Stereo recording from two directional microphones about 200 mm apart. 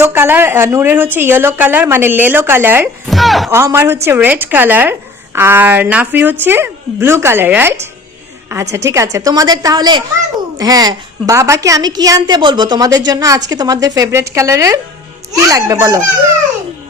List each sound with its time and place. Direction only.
0.0 s a woman's voice: 10° right (ahead or behind)
3.5 s a woman's voice: 15° right (ahead or behind)